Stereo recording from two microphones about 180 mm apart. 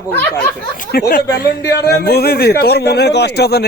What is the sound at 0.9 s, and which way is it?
A man's voice, 60° left (ahead or behind).